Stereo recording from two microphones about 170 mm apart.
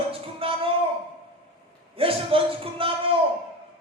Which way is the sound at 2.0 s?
30° right (ahead or behind).